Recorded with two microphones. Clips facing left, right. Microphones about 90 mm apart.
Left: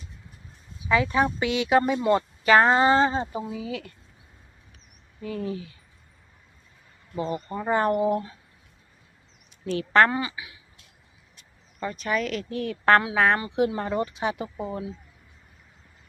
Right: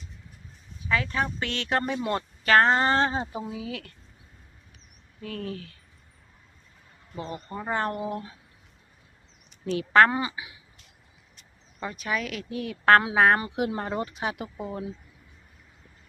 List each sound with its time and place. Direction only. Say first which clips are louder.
0.9 s speech: left 5 dB; 15° left (ahead or behind)
5.2 s speech: left 4 dB; 5° left (ahead or behind)
7.2 s speech: left 6 dB; centre (ahead or behind)
9.7 s speech: even; 5° right (ahead or behind)
10.1 s speech: even; 25° right (ahead or behind)
11.8 s speech: left 3 dB; 5° right (ahead or behind)
13.0 s speech: right 1 dB; 25° right (ahead or behind)
13.7 s speech: left 3 dB; 10° right (ahead or behind)
14.7 s speech: left 1 dB; 15° left (ahead or behind)